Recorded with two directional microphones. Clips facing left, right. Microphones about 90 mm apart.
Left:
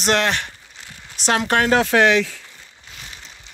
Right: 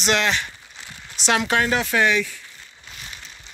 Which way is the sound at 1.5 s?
80° left.